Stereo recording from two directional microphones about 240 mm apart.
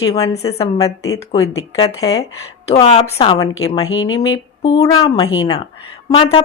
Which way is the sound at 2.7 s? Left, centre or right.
Left.